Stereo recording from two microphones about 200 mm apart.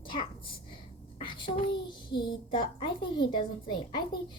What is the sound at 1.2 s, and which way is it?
A child's voice, 25° left (ahead or behind).